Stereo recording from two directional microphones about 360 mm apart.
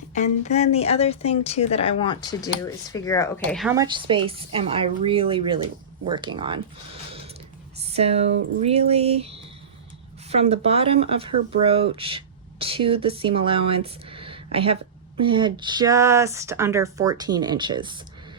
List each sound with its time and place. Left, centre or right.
0.1 s speech: centre
7.9 s speech: centre